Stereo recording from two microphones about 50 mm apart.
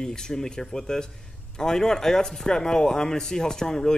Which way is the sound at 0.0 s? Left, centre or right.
Centre.